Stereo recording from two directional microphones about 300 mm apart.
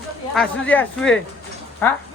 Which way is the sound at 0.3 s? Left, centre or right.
Centre.